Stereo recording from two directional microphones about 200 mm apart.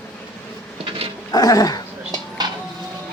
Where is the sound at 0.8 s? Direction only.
30° right (ahead or behind).